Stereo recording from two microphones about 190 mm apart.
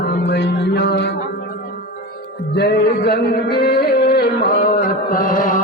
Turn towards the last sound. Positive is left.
turn(degrees=45)  # may be behind; listen again after turning